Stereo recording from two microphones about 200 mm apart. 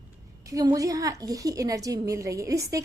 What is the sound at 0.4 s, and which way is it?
A woman's voice, 15° right (ahead or behind).